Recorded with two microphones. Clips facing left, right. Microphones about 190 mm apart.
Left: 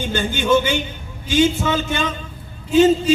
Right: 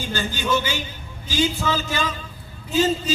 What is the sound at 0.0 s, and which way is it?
A man's voice, 25° left (ahead or behind).